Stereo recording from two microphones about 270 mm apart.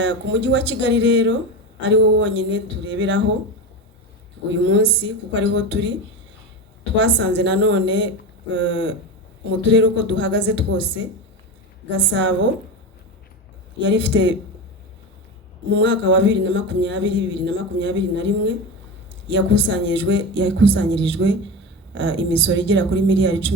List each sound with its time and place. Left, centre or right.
0.0 s speech: right
4.4 s speech: right
6.9 s speech: right
11.9 s speech: right
13.7 s speech: right
15.7 s speech: right